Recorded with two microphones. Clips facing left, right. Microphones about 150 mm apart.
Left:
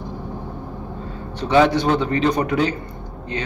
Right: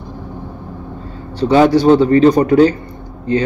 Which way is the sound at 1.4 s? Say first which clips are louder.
Right 6 dB; 35° right (ahead or behind).